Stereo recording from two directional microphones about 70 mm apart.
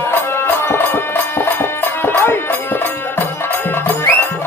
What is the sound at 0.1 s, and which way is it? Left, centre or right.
Music, left.